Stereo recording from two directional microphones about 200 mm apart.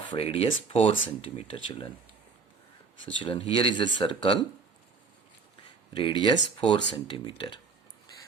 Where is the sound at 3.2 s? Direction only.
25° left (ahead or behind).